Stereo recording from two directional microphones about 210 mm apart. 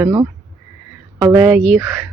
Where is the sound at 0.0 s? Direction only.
15° right (ahead or behind).